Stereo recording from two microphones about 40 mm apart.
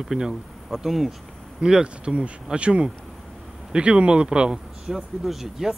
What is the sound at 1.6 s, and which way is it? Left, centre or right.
Speech, right.